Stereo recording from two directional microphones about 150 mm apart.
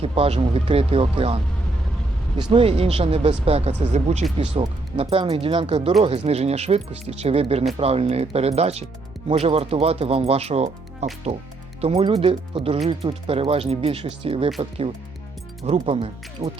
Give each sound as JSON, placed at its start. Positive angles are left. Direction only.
{"t": 0.0, "sound": "speech", "side_deg": -40}
{"t": 2.4, "sound": "speech", "side_deg": -35}